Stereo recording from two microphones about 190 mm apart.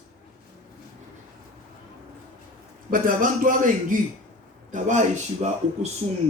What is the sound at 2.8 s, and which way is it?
A man's voice, 45° right (ahead or behind).